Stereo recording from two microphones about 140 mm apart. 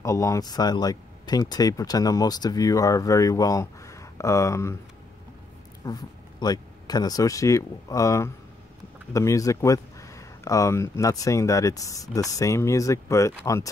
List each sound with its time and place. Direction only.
0.0 s speech: 20° left (ahead or behind)
5.9 s speech: 30° left (ahead or behind)